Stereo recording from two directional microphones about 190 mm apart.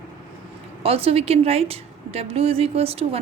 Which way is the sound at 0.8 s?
30° right (ahead or behind).